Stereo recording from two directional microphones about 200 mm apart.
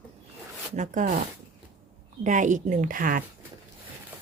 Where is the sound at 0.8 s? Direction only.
40° right (ahead or behind).